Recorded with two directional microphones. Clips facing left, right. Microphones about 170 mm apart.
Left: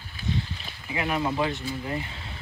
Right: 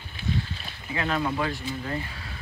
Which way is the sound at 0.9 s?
15° left (ahead or behind).